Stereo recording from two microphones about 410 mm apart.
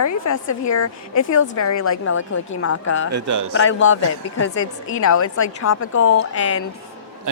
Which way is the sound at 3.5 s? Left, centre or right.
Left.